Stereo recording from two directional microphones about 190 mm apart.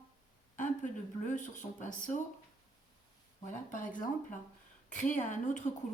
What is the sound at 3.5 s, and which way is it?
A woman's voice, 45° left (ahead or behind).